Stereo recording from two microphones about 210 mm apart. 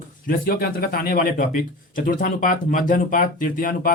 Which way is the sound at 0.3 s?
45° left (ahead or behind).